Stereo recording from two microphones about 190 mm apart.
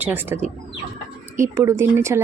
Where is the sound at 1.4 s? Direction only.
15° right (ahead or behind).